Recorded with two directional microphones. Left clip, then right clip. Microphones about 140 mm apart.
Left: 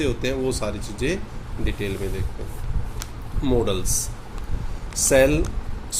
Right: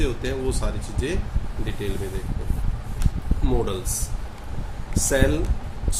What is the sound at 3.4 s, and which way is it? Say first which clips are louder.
Speech: left 4 dB; 40° left (ahead or behind).